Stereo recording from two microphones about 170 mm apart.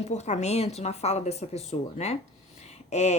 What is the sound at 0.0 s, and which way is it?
Speech, 40° left (ahead or behind).